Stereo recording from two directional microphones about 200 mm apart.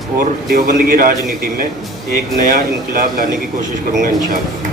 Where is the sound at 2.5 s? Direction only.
45° right (ahead or behind).